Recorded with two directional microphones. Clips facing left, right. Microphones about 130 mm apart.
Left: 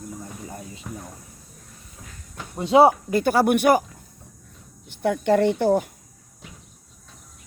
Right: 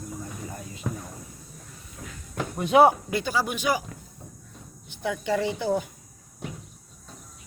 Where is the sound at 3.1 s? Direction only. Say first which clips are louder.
Left 8 dB; 55° left (ahead or behind).